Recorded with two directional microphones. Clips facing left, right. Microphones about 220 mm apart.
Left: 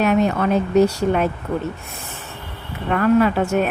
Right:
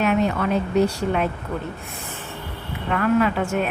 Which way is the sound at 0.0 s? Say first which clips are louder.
Left 3 dB; 40° left (ahead or behind).